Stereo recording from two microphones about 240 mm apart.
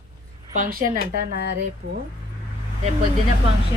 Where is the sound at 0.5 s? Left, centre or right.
Right.